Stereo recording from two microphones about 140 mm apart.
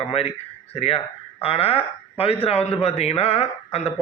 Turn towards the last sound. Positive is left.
turn(degrees=45)  # may be behind; listen again after turning